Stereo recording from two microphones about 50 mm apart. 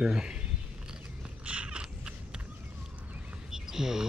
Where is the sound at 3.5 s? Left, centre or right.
Centre.